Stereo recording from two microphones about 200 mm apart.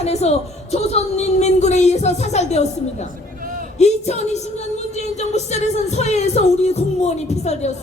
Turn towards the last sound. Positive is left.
turn(degrees=35)  # may be behind; listen again after turning